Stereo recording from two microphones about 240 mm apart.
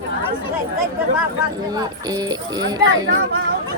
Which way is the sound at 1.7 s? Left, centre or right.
Centre.